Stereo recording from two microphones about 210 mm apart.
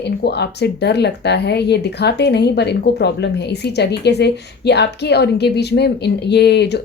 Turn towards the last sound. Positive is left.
turn(degrees=50)  # may be behind; listen again after turning